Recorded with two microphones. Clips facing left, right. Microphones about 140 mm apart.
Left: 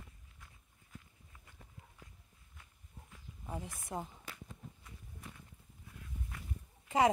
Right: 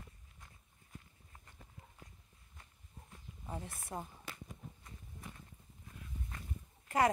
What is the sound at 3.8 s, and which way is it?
Speech, 15° left (ahead or behind).